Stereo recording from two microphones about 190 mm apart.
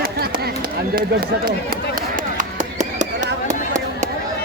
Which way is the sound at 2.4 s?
40° right (ahead or behind).